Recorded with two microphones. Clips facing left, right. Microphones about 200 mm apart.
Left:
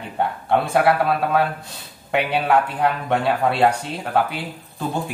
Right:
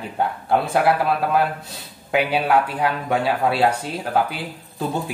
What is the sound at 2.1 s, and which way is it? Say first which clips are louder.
Speech: even; centre (ahead or behind).